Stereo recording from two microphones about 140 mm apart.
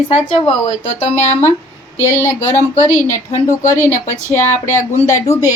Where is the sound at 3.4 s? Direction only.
20° left (ahead or behind).